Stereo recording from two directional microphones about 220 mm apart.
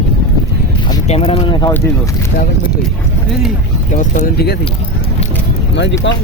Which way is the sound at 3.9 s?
35° left (ahead or behind).